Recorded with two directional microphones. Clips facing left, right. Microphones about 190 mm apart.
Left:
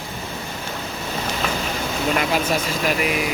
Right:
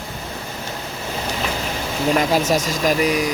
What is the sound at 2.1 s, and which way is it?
Speech, 40° right (ahead or behind).